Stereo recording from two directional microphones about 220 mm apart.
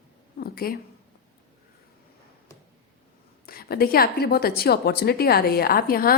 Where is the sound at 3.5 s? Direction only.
45° left (ahead or behind).